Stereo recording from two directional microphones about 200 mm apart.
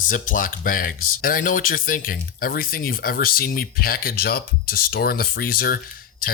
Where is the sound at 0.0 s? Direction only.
40° left (ahead or behind).